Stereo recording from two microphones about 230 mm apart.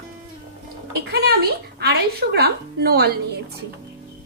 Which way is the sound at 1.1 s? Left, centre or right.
Right.